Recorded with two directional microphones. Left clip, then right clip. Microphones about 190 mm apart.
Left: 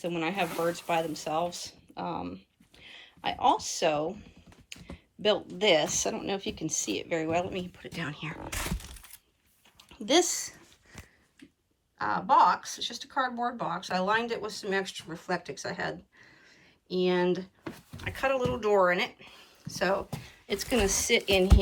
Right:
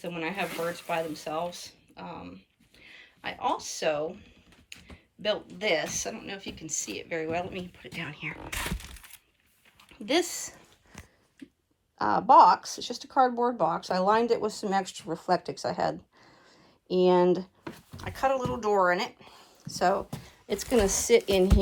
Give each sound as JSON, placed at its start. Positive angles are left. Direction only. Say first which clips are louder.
{"t": 0.0, "sound": "speech", "louder": "left 2 dB", "side_deg": 0}
{"t": 4.7, "sound": "computer keyboard", "louder": "left 1 dB", "side_deg": 5}
{"t": 5.2, "sound": "speech", "louder": "left 3 dB", "side_deg": 5}
{"t": 10.1, "sound": "speech", "louder": "left 2 dB", "side_deg": -25}
{"t": 11.9, "sound": "speech", "louder": "right 5 dB", "side_deg": -20}
{"t": 15.6, "sound": "speech", "louder": "right 5 dB", "side_deg": 5}
{"t": 16.9, "sound": "a woman's voice", "louder": "right 5 dB", "side_deg": -20}
{"t": 19.3, "sound": "a sound", "louder": "right 1 dB", "side_deg": -10}
{"t": 20.7, "sound": "a woman's voice", "louder": "right 4 dB", "side_deg": -15}